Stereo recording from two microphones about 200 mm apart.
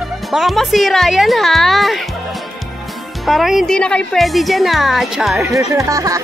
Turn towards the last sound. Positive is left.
turn(degrees=-15)  # may be behind; listen again after turning